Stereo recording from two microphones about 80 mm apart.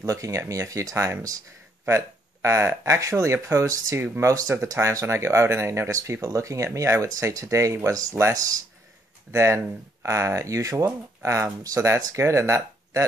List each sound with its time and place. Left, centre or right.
0.0 s speech: right
4.0 s speech: right
4.3 s speech: right